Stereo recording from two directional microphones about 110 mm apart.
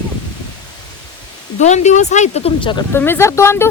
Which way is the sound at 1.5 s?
90° left.